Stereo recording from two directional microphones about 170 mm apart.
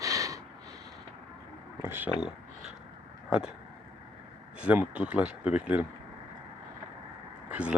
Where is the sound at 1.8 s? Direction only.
10° right (ahead or behind).